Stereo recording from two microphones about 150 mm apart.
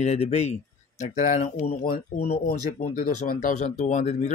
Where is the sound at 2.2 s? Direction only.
90° left.